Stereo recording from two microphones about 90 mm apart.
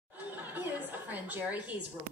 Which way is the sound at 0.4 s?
20° right (ahead or behind).